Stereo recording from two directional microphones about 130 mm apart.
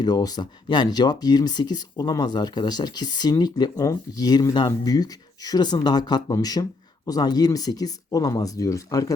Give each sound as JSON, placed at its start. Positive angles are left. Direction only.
{"t": 0.0, "sound": "speech", "side_deg": 30}